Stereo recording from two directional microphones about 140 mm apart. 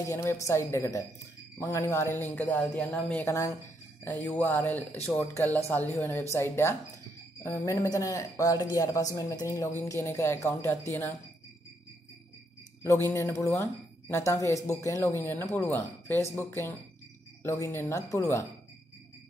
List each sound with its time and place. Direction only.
0.0 s speech: 20° left (ahead or behind)
12.8 s speech: 20° left (ahead or behind)